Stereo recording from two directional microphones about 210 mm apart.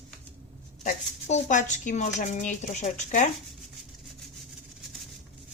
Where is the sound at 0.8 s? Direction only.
35° left (ahead or behind).